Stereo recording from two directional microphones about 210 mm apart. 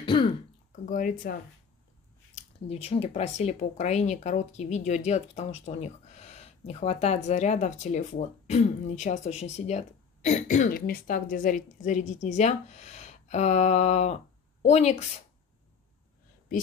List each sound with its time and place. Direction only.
0.0 s speech: 25° left (ahead or behind)
0.8 s speech: 40° left (ahead or behind)
2.3 s speech: 30° left (ahead or behind)